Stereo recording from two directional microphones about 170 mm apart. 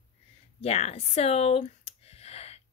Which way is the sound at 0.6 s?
40° left (ahead or behind).